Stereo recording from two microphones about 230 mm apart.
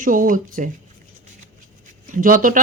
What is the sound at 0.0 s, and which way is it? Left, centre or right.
Speech, right.